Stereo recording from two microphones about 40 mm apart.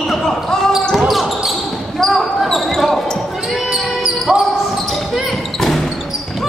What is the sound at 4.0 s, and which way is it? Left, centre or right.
Basketball bounce, centre.